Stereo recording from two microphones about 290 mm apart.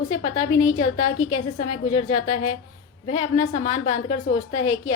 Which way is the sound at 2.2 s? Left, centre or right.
Left.